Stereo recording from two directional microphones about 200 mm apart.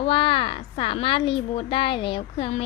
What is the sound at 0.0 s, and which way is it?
Speech, 25° left (ahead or behind).